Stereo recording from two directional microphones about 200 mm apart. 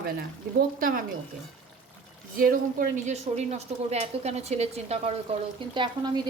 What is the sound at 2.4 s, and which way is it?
A woman's voice, 45° right (ahead or behind).